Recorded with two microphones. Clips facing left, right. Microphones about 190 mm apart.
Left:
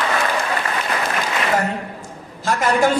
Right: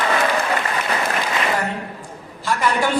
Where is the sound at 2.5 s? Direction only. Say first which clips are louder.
Left 3 dB; 45° left (ahead or behind).